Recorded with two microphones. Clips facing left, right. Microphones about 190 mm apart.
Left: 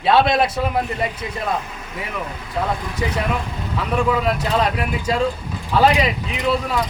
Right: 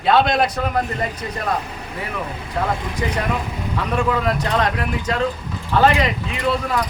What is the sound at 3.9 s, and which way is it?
Speech, 5° left (ahead or behind).